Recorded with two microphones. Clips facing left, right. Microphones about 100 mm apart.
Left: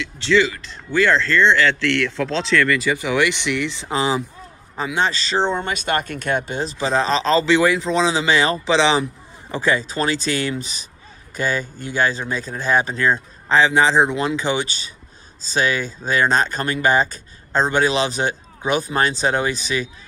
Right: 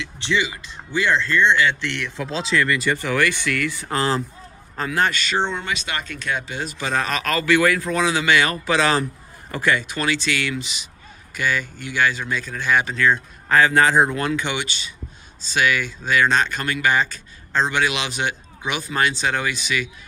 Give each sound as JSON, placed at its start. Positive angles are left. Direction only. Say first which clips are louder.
{"t": 0.2, "sound": "speech", "louder": "left 6 dB", "side_deg": -20}
{"t": 3.0, "sound": "speech", "louder": "left 2 dB", "side_deg": 15}
{"t": 6.6, "sound": "speech", "louder": "left 3 dB", "side_deg": 30}
{"t": 13.6, "sound": "speech", "louder": "left 1 dB", "side_deg": 20}